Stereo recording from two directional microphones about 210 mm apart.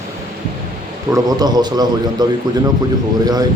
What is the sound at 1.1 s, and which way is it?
A man's voice, 20° right (ahead or behind).